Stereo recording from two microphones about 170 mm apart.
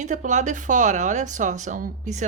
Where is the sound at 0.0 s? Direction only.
45° right (ahead or behind).